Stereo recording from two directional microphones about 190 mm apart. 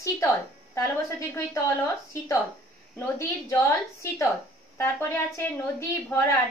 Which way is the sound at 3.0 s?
15° left (ahead or behind).